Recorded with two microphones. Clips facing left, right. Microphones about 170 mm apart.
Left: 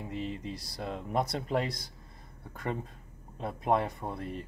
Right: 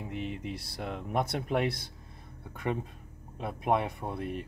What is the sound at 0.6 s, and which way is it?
Speech, 5° right (ahead or behind).